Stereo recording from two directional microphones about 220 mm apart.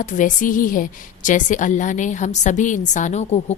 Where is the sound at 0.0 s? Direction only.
35° left (ahead or behind).